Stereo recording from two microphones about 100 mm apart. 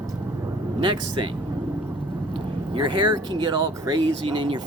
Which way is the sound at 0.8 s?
55° right (ahead or behind).